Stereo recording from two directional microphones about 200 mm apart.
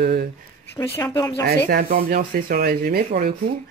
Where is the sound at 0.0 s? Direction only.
50° right (ahead or behind).